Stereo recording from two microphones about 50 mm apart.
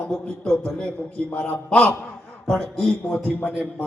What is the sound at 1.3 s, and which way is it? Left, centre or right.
Speech, left.